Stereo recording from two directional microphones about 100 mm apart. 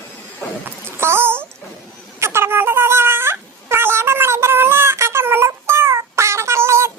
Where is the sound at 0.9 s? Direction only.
25° right (ahead or behind).